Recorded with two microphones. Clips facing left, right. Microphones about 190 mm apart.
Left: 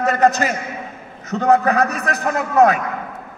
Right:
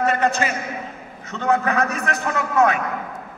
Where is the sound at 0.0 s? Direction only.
40° left (ahead or behind).